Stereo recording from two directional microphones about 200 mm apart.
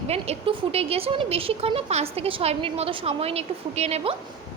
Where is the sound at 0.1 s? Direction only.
30° right (ahead or behind).